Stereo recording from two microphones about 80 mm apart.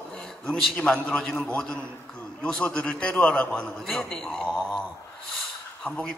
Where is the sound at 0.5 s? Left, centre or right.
Centre.